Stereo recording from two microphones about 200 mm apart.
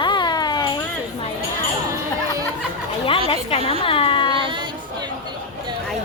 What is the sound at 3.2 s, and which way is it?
A woman's voice, 30° left (ahead or behind).